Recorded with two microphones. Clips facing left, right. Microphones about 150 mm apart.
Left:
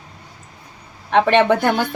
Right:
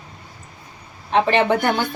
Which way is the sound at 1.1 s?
65° left (ahead or behind).